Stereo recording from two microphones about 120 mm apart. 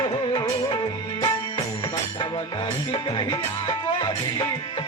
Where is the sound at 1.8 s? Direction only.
40° left (ahead or behind).